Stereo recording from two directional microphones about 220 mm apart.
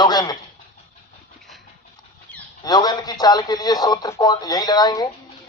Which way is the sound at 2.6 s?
20° left (ahead or behind).